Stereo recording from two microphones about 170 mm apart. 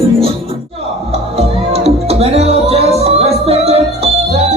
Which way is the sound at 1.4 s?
35° right (ahead or behind).